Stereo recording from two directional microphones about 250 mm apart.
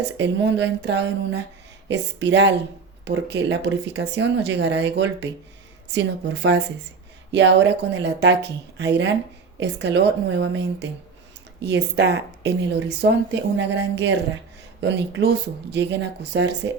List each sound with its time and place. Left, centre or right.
0.2 s speech: right